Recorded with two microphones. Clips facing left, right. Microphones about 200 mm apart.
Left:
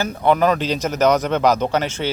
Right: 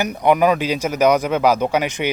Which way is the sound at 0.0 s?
15° right (ahead or behind).